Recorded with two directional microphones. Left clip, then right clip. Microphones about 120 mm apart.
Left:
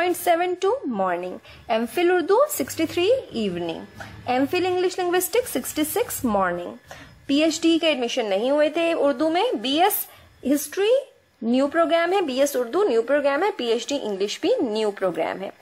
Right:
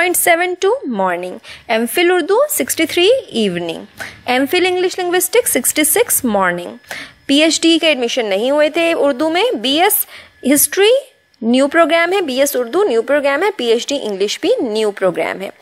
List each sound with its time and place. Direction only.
0.0 s a woman's voice: 15° right (ahead or behind)